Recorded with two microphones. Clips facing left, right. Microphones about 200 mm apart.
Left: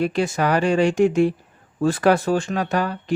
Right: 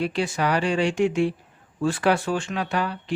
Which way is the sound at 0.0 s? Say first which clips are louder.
Left 4 dB; 45° left (ahead or behind).